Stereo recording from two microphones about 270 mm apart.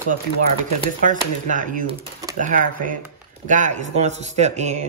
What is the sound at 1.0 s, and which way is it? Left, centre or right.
Speech, right.